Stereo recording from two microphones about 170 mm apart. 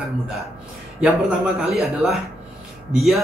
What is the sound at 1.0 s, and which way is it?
A man's voice, 5° right (ahead or behind).